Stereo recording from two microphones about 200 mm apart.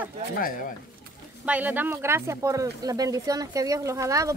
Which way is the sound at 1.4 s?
5° right (ahead or behind).